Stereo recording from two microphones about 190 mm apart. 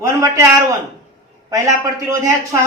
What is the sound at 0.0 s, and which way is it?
A man's voice, 15° right (ahead or behind).